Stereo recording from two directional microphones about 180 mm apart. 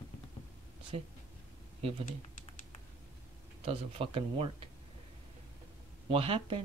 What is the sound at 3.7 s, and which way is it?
Speech, 30° right (ahead or behind).